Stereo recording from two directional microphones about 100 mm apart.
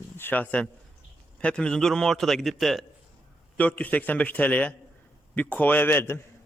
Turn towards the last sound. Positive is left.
turn(degrees=20)  # may be behind; listen again after turning